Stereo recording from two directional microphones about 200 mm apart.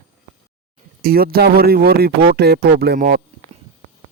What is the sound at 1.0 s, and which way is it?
Speech, 50° right (ahead or behind).